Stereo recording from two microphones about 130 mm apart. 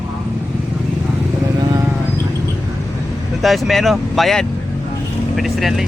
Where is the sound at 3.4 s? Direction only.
Centre (ahead or behind).